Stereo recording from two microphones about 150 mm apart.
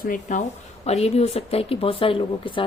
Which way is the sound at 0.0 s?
60° left (ahead or behind).